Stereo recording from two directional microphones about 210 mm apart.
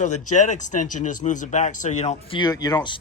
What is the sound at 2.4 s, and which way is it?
Speech, 20° left (ahead or behind).